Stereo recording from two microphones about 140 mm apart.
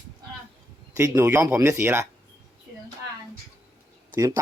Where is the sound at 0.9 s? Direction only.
20° right (ahead or behind).